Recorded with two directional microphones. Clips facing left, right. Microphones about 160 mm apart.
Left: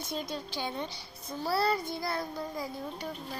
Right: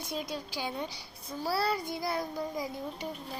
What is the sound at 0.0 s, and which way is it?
A child's voice, 10° right (ahead or behind).